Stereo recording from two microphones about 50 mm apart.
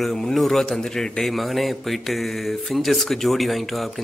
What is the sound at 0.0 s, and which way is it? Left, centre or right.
Speech, centre.